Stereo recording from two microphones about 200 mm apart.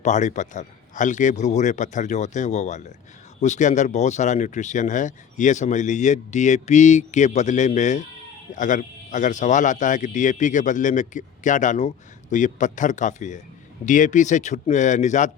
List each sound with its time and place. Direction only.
0.0 s a man's voice: 35° left (ahead or behind)